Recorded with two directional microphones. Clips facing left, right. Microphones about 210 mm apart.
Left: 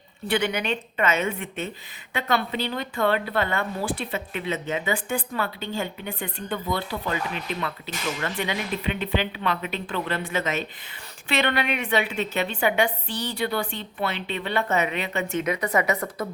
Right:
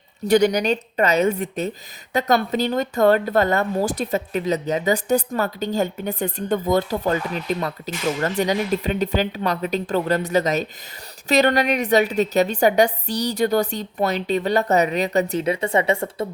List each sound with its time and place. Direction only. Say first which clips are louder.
0.3 s speech: right 8 dB; 40° right (ahead or behind)